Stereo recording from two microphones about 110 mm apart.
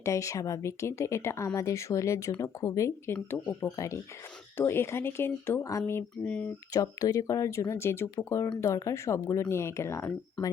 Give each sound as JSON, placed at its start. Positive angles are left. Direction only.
{"t": 0.0, "sound": "speech", "side_deg": 25}
{"t": 6.2, "sound": "speech", "side_deg": 10}
{"t": 6.7, "sound": "speech", "side_deg": 30}